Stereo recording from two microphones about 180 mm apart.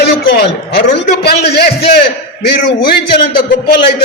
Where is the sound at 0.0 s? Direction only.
60° left (ahead or behind).